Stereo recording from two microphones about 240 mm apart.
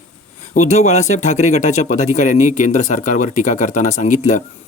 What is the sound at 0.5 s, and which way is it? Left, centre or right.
Speech, left.